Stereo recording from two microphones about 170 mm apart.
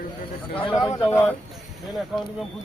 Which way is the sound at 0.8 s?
20° left (ahead or behind).